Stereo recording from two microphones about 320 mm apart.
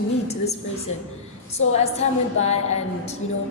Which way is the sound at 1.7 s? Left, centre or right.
Centre.